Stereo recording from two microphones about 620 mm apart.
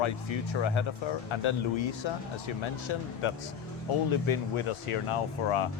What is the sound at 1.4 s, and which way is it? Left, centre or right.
Speech, left.